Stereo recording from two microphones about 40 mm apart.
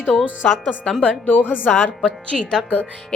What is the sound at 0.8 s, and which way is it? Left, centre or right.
Speech, centre.